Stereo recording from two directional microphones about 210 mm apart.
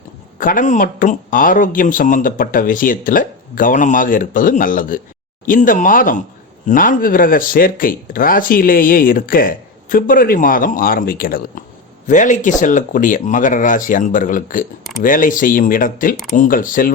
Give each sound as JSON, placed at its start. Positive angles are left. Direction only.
{"t": 0.3, "sound": "speech", "side_deg": 40}